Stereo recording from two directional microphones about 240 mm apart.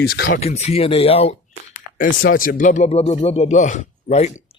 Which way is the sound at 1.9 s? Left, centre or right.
Left.